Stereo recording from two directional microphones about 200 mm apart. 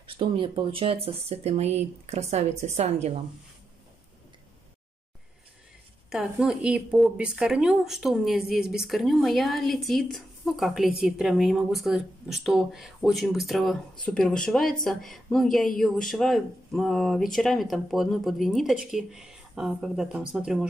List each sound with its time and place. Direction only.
0.0 s speech: 25° right (ahead or behind)
6.0 s a woman's voice: 5° right (ahead or behind)